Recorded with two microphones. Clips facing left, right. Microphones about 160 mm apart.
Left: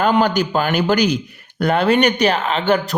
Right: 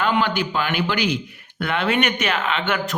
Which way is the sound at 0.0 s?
40° left (ahead or behind).